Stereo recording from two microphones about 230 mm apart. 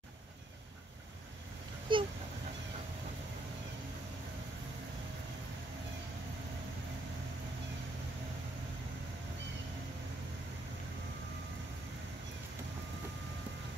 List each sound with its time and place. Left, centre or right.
1.9 s speech: right